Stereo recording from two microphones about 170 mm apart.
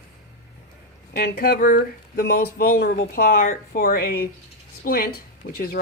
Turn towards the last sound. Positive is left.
turn(degrees=60)  # may be behind; listen again after turning